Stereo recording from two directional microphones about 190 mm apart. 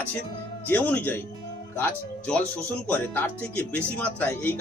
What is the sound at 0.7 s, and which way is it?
Speech, 10° left (ahead or behind).